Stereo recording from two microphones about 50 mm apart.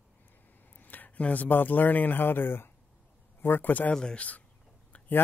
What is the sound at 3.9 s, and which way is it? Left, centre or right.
Speech, centre.